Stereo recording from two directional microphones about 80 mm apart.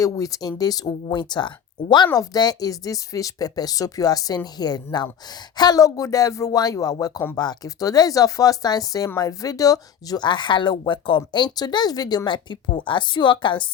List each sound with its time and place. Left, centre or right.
0.0 s speech: left
2.1 s speech: left
10.2 s speech: left